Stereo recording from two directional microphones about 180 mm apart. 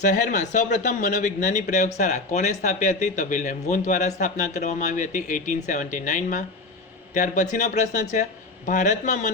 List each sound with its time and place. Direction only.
0.0 s a man's voice: 45° left (ahead or behind)